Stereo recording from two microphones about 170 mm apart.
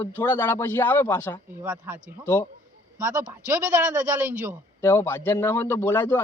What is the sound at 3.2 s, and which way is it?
Speech, 10° right (ahead or behind).